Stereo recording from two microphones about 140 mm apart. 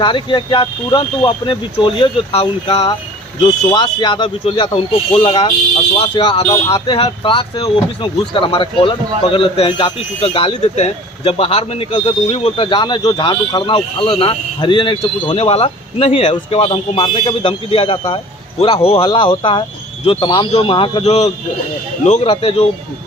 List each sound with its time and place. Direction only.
0.0 s speech: 35° left (ahead or behind); by 2.8 s 50° left (ahead or behind)
3.8 s speech: 35° left (ahead or behind)
21.0 s speech: 50° left (ahead or behind)
22.3 s speech: 40° left (ahead or behind)